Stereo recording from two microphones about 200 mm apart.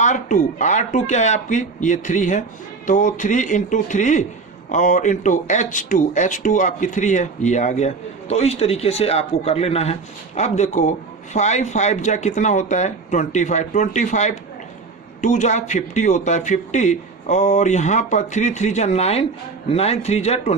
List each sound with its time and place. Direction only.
0.0 s speech: 40° left (ahead or behind)